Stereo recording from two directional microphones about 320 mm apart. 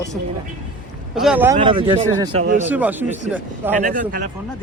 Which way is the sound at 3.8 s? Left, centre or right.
Right.